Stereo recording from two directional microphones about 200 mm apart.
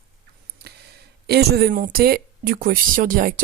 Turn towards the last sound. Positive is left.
turn(degrees=-45)  # may be behind; listen again after turning